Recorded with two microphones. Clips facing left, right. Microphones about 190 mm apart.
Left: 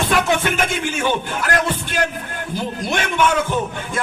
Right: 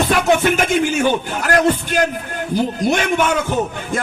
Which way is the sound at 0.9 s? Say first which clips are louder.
Right 4 dB; 45° right (ahead or behind).